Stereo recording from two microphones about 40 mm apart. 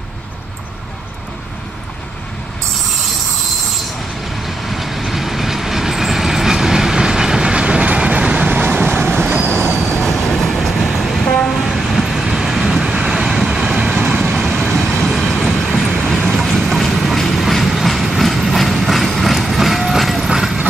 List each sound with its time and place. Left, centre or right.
4.6 s train: centre; by 8.2 s right
8.2 s vehicle: right
9.5 s train: centre
11.2 s train: left
11.7 s vehicle: centre
14.4 s vehicle: centre
15.4 s train: centre
20.2 s vehicle: centre